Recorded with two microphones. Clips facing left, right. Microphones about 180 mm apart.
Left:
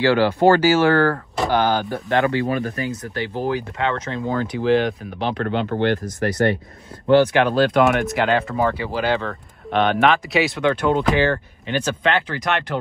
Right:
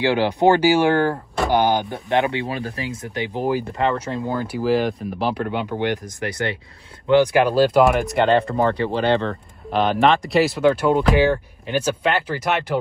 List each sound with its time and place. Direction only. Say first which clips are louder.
0.0 s speech: left 2 dB; 15° right (ahead or behind)
7.2 s speech: right 1 dB; 10° right (ahead or behind)